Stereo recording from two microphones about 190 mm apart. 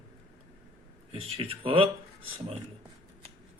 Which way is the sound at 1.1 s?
30° right (ahead or behind).